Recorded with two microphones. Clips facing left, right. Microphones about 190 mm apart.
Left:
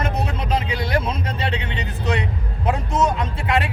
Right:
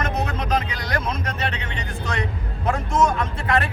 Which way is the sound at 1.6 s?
15° left (ahead or behind).